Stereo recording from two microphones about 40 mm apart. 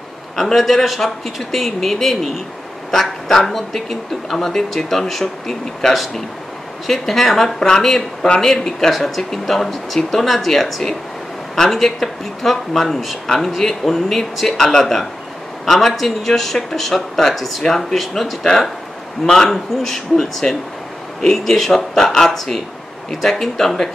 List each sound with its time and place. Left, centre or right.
0.4 s speech: centre
19.2 s speech: centre